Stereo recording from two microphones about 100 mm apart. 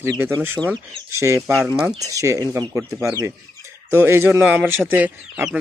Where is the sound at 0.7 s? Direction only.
30° right (ahead or behind).